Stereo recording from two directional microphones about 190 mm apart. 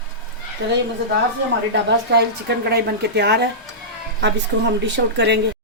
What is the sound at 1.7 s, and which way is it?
A woman's voice, 65° right (ahead or behind).